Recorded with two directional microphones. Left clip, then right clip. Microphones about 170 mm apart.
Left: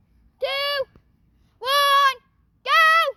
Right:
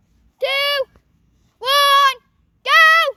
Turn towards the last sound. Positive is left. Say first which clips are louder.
# right 5 dB
turn(degrees=-10)  # may be behind; listen again after turning